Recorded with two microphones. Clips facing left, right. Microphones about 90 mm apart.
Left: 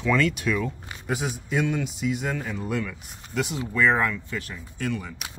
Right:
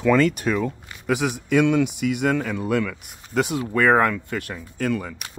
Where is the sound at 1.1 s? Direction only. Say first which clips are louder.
Right 7 dB; 75° right (ahead or behind); by 5.2 s 50° right (ahead or behind).